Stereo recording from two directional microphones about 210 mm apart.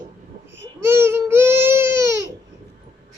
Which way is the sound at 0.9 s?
10° right (ahead or behind).